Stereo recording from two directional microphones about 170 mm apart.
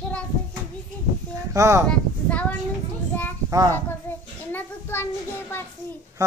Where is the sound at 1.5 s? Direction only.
15° right (ahead or behind).